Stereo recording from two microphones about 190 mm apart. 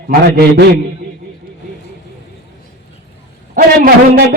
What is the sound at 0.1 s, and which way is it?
Speech, 50° right (ahead or behind).